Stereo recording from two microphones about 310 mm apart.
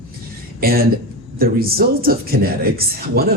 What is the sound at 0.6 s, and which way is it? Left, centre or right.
A woman's voice, right.